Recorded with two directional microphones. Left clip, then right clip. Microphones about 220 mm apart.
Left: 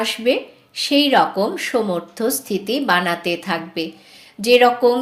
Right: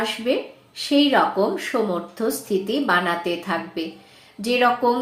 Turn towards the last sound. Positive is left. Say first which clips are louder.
# left 6 dB
turn(degrees=40)  # may be behind; listen again after turning